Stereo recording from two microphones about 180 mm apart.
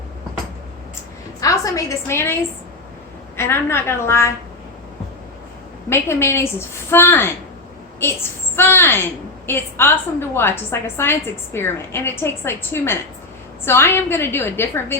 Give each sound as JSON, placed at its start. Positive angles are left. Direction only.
{"t": 1.4, "sound": "a woman's voice", "side_deg": 20}
{"t": 5.9, "sound": "a woman's voice", "side_deg": 15}